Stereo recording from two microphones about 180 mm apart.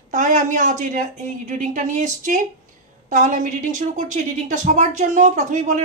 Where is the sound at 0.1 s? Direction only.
45° right (ahead or behind).